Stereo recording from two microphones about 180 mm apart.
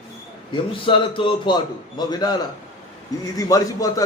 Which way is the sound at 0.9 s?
30° left (ahead or behind).